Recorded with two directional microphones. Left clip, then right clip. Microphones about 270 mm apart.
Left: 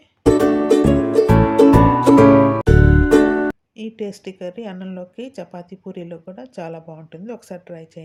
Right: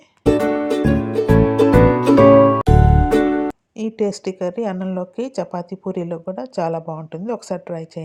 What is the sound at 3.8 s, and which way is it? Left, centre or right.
Speech, right.